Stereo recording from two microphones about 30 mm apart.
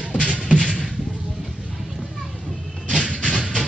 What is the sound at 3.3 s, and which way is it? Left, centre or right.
Music, centre.